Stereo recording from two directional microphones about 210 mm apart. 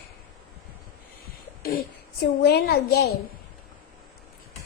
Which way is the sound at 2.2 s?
50° left (ahead or behind).